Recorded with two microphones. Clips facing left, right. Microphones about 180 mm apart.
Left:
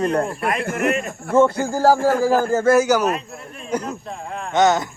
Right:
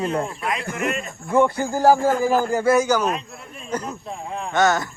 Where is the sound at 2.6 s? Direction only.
5° left (ahead or behind).